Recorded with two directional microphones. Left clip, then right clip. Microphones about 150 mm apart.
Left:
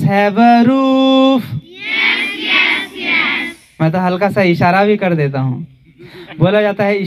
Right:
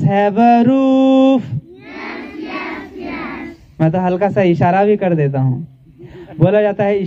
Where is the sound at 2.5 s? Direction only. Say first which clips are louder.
Left 14 dB; 15° right (ahead or behind).